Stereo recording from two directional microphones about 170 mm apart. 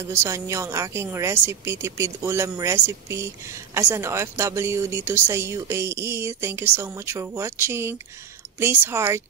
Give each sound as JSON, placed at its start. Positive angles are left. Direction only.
{"t": 0.0, "sound": "a woman's voice", "side_deg": -15}